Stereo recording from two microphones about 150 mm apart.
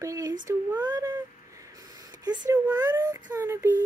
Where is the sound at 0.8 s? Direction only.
30° right (ahead or behind).